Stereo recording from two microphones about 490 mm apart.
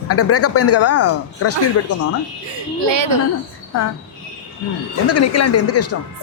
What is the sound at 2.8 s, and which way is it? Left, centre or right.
Speech, right.